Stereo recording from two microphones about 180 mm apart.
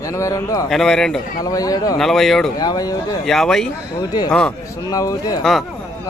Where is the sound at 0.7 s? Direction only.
5° left (ahead or behind).